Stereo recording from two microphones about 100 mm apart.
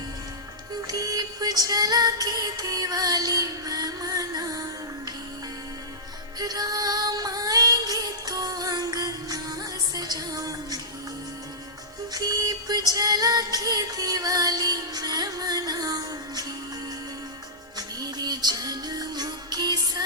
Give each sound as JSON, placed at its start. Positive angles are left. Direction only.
{"t": 0.9, "sound": "music", "side_deg": -35}
{"t": 6.4, "sound": "music", "side_deg": -40}
{"t": 12.1, "sound": "music", "side_deg": -40}
{"t": 17.7, "sound": "music", "side_deg": -45}